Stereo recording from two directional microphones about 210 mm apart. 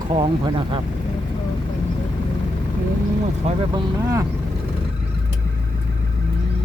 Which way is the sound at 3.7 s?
15° right (ahead or behind).